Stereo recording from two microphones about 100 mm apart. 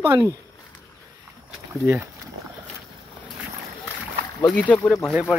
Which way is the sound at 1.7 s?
20° right (ahead or behind).